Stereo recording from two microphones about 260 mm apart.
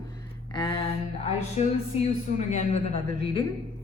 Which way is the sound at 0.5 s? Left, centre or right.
Centre.